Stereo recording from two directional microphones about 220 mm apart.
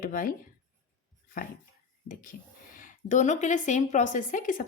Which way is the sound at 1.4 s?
40° left (ahead or behind).